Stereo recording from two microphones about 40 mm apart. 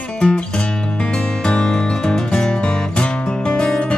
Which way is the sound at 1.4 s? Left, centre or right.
Centre.